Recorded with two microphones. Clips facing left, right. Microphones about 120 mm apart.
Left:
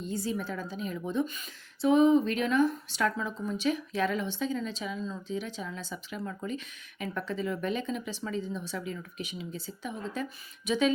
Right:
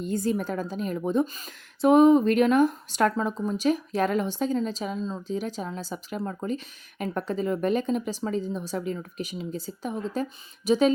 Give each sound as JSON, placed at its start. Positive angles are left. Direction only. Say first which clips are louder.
{"t": 0.0, "sound": "speech", "louder": "right 6 dB", "side_deg": -55}
{"t": 1.8, "sound": "speech", "louder": "right 5 dB", "side_deg": -55}